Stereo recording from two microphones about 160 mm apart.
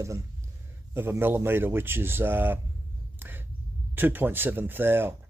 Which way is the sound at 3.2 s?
15° right (ahead or behind).